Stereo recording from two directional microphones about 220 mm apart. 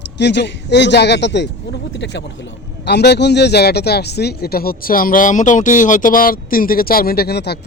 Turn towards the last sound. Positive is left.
turn(degrees=50)  # may be behind; listen again after turning